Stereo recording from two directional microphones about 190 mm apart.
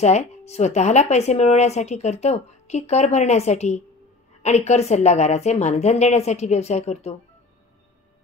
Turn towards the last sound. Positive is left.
turn(degrees=35)  # may be behind; listen again after turning